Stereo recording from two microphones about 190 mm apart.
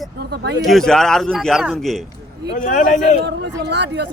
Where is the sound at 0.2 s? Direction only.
55° right (ahead or behind).